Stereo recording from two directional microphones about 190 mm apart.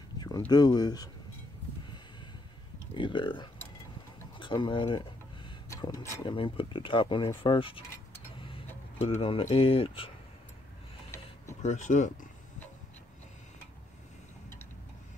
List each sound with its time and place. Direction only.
0.5 s speech: 20° left (ahead or behind)
2.9 s speech: 25° left (ahead or behind)
9.0 s speech: 30° left (ahead or behind)
11.6 s speech: 40° left (ahead or behind)